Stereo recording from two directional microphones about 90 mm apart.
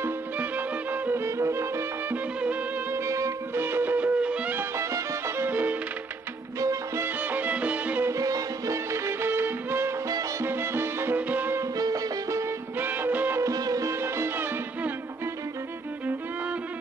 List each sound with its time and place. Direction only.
0.0 s music: 20° right (ahead or behind); by 3.6 s 35° right (ahead or behind)
3.6 s music: 20° right (ahead or behind)
4.6 s music: 30° right (ahead or behind)
6.6 s music: 35° right (ahead or behind)
7.2 s music: 20° right (ahead or behind)
8.1 s music: 40° right (ahead or behind); by 11.6 s 20° right (ahead or behind)
11.7 s music: 45° right (ahead or behind)
12.7 s music: 20° right (ahead or behind)
13.4 s music: 40° right (ahead or behind)
14.0 s music: 30° right (ahead or behind)